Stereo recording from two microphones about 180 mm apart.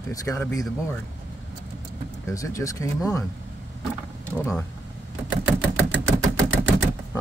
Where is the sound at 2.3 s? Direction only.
20° left (ahead or behind).